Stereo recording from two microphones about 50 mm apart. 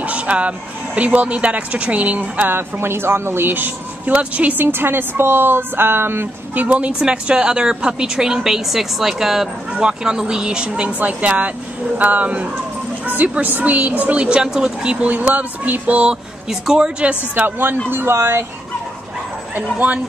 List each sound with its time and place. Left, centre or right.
0.0 s speech: right
2.5 s speech: right
4.6 s a woman's voice: right
6.5 s speech: right
6.9 s a woman's voice: centre
11.0 s speech: right
14.2 s a woman's voice: centre
15.0 s speech: right
16.4 s a woman's voice: centre
17.4 s speech: right
17.8 s speech: right
19.5 s speech: right